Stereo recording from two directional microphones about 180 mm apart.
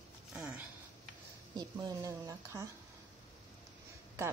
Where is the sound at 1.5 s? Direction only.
20° right (ahead or behind).